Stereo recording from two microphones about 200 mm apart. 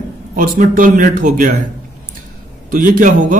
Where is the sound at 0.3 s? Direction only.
40° right (ahead or behind).